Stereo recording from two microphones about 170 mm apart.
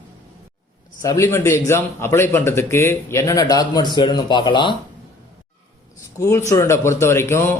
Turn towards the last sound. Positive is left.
turn(degrees=15)  # may be behind; listen again after turning